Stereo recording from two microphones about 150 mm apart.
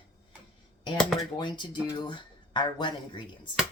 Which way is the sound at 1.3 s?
30° left (ahead or behind).